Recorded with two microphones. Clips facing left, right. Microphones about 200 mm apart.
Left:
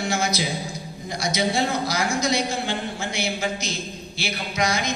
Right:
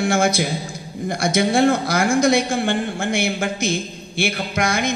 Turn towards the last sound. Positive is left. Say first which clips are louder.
# right 3 dB
turn(degrees=-55)  # may be behind; listen again after turning